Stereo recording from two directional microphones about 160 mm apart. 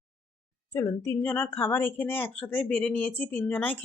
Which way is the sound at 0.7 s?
20° left (ahead or behind).